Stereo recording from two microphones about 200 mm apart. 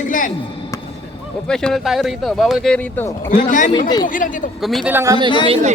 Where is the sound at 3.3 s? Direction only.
40° left (ahead or behind).